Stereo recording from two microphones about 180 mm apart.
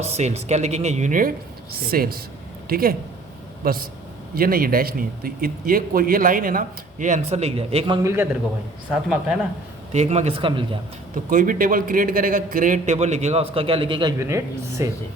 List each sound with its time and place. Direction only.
0.0 s speech: 35° right (ahead or behind)
1.9 s a man's voice: 55° right (ahead or behind); by 7.9 s 35° right (ahead or behind)
8.0 s a woman's voice: 15° right (ahead or behind)
8.9 s speech: 5° right (ahead or behind)
9.9 s speech: 40° right (ahead or behind)
11.1 s speech: 50° right (ahead or behind); by 14.1 s 30° right (ahead or behind)
14.2 s a woman's voice: 15° right (ahead or behind)